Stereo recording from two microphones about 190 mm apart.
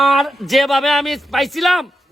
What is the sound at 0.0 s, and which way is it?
A man's voice, centre (ahead or behind).